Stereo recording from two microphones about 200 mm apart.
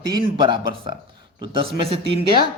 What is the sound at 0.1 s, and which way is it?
A man's voice, 25° right (ahead or behind).